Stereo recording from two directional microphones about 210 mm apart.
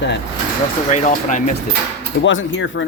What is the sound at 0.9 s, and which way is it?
Speech, 35° left (ahead or behind).